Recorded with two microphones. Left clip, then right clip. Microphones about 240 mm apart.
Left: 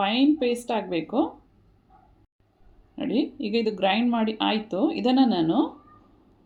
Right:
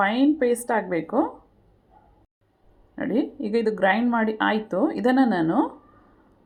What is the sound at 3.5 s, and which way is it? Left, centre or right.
Speech, centre.